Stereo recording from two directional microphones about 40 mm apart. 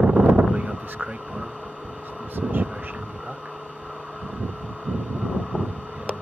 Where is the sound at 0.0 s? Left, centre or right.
Right.